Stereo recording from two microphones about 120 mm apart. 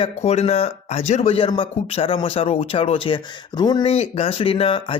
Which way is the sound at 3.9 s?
55° left (ahead or behind).